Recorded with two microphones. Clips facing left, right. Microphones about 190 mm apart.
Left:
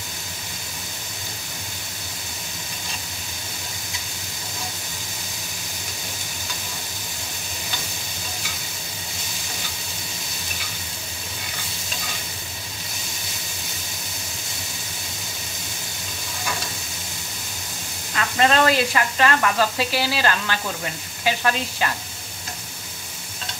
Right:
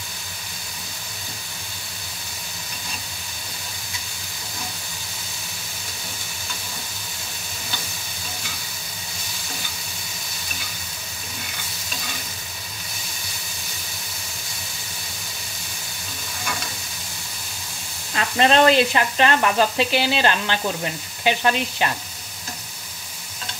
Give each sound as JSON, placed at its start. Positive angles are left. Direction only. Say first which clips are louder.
{"t": 18.1, "sound": "speech", "louder": "right 2 dB", "side_deg": -25}